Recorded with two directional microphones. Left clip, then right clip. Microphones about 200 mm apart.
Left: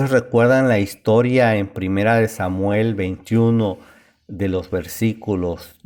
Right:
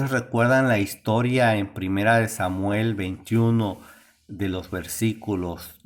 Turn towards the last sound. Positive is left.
turn(degrees=25)  # may be behind; listen again after turning